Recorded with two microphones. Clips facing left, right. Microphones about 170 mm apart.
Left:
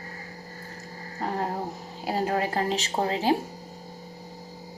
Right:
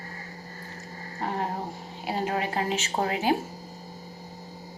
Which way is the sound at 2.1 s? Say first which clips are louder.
Left 2 dB; 40° left (ahead or behind).